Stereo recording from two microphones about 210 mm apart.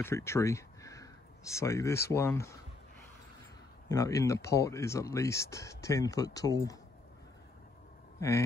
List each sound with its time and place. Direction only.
0.0 s a sound: 10° left (ahead or behind)
1.6 s speech: 15° left (ahead or behind)
3.9 s speech: 15° left (ahead or behind)
8.2 s a man's voice: 15° left (ahead or behind)